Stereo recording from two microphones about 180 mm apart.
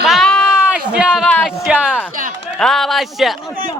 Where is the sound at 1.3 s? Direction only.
5° left (ahead or behind).